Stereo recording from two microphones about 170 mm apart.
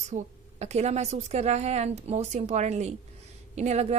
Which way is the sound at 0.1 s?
45° right (ahead or behind).